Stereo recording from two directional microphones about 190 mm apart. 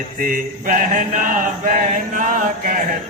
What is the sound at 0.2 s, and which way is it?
Mantra, 45° right (ahead or behind).